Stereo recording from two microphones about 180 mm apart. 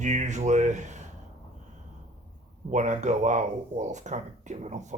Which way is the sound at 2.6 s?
40° right (ahead or behind).